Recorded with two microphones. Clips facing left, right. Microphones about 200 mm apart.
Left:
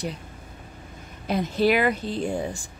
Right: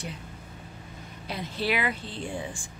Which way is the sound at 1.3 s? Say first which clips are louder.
Left 9 dB; 45° left (ahead or behind).